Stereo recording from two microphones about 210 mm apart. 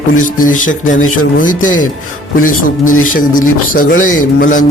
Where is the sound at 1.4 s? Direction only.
40° left (ahead or behind).